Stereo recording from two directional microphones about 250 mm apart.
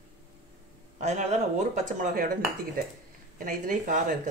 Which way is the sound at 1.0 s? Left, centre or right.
Right.